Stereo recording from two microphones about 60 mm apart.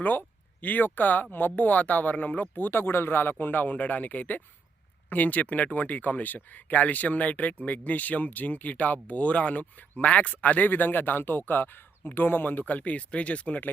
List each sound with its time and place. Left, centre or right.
0.0 s speech: left